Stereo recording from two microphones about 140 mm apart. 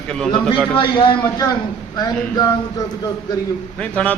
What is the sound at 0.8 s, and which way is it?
Speech, 35° left (ahead or behind).